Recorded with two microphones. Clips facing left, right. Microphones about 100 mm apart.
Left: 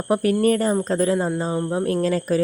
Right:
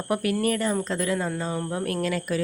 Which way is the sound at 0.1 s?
35° left (ahead or behind).